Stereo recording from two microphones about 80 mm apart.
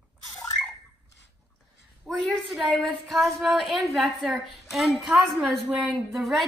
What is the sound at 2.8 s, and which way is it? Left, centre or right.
A woman's voice, centre.